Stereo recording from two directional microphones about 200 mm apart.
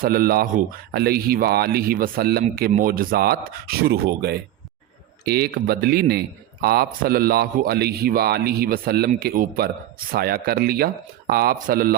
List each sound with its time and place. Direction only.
0.0 s speech: 50° right (ahead or behind)